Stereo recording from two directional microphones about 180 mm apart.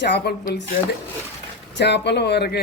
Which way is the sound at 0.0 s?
65° left (ahead or behind).